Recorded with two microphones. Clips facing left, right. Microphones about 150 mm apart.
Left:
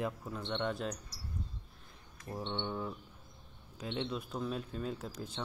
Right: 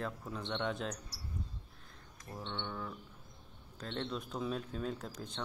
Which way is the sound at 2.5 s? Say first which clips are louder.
Left 3 dB; 25° left (ahead or behind).